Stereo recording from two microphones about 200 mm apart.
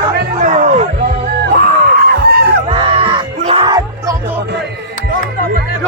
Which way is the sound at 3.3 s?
30° right (ahead or behind).